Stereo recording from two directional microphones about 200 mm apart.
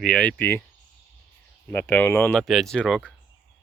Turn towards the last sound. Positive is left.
turn(degrees=5)  # may be behind; listen again after turning